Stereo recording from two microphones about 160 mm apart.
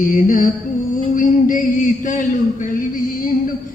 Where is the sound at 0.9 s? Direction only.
60° left (ahead or behind).